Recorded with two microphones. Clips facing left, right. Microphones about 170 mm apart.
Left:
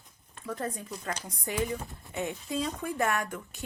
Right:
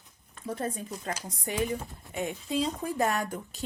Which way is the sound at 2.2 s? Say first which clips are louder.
Right 2 dB; 25° right (ahead or behind).